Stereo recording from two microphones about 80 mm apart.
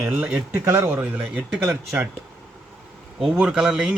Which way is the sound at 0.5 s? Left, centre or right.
Right.